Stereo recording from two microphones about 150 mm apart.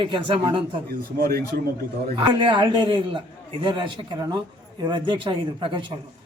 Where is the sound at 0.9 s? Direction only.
85° right.